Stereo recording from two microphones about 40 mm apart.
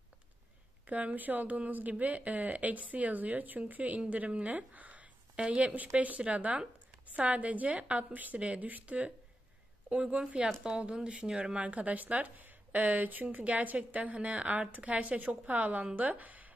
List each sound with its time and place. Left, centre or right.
0.8 s speech: right
5.3 s speech: right
5.9 s a woman's voice: right
11.5 s a woman's voice: right